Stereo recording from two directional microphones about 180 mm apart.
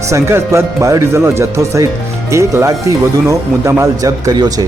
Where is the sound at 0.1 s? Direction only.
15° right (ahead or behind).